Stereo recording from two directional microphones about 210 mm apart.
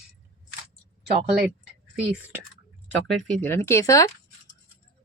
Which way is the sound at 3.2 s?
10° left (ahead or behind).